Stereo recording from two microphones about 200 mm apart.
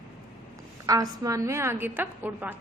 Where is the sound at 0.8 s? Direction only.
15° right (ahead or behind).